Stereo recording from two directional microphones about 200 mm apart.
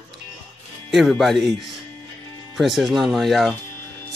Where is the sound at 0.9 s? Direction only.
Centre (ahead or behind).